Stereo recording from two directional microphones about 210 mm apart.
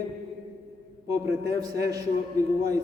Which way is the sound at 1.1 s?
15° right (ahead or behind).